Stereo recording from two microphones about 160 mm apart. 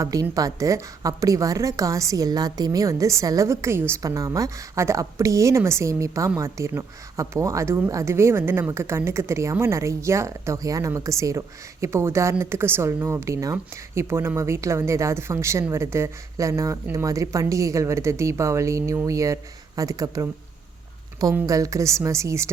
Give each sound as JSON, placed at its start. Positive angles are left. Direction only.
{"t": 0.0, "sound": "a woman's voice", "side_deg": -20}
{"t": 21.3, "sound": "a woman's voice", "side_deg": -20}